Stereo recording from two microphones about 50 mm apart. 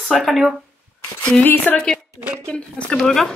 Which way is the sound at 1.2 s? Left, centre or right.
Left.